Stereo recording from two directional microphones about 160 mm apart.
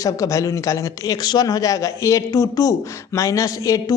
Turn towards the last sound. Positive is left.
turn(degrees=20)  # may be behind; listen again after turning